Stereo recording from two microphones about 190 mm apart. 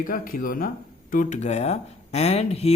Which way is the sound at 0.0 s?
45° left (ahead or behind).